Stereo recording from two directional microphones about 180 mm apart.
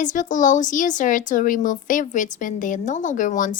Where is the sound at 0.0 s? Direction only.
45° left (ahead or behind).